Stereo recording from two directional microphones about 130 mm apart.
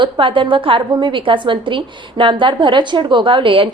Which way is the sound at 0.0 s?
40° right (ahead or behind).